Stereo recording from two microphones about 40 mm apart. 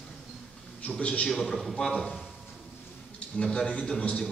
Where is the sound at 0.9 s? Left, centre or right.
Left.